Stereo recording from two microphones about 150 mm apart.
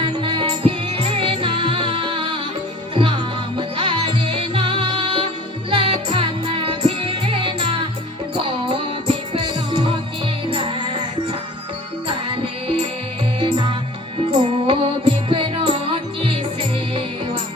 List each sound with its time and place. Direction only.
0.2 s music: 35° right (ahead or behind)
13.4 s music: 35° right (ahead or behind)